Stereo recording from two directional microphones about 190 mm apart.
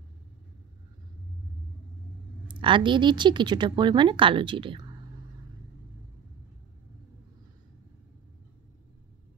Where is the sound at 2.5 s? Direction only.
25° right (ahead or behind).